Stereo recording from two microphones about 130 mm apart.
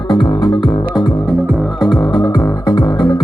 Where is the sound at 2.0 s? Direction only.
35° left (ahead or behind).